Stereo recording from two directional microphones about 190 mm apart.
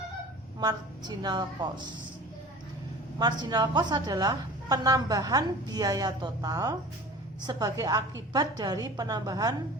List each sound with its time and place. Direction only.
0.6 s a woman's voice: 20° right (ahead or behind)
3.2 s a woman's voice: 20° right (ahead or behind)